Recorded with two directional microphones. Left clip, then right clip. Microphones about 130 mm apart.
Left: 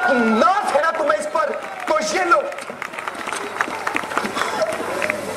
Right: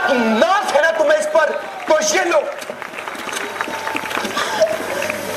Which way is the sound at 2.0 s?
5° right (ahead or behind).